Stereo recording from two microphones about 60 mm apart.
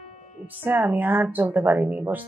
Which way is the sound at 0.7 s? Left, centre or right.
Right.